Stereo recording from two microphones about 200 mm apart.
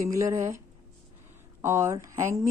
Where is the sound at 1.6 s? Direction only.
15° right (ahead or behind).